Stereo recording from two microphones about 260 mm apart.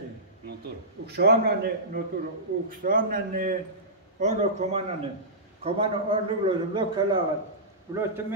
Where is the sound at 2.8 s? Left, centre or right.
Right.